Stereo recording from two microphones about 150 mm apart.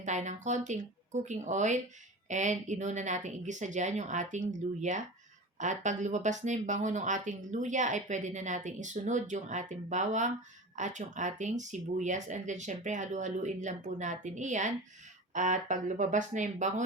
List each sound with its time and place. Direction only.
0.0 s speech: 50° right (ahead or behind)